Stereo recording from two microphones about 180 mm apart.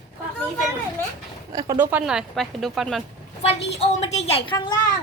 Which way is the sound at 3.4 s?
35° left (ahead or behind).